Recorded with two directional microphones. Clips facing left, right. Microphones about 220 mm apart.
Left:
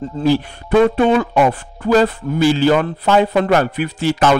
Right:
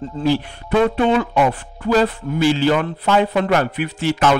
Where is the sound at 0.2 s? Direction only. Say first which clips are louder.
Left 3 dB; 45° left (ahead or behind).